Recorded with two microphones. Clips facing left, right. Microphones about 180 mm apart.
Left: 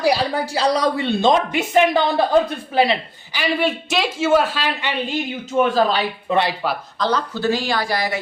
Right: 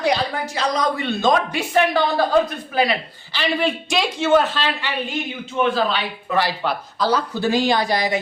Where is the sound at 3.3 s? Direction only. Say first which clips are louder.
Left 1 dB; 5° left (ahead or behind).